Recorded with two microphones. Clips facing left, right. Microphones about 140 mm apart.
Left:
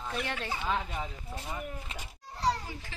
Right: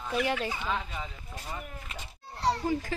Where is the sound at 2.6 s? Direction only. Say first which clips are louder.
Right 14 dB; 45° right (ahead or behind).